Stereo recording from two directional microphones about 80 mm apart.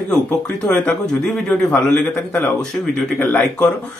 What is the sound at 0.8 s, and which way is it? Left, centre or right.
Speech, centre.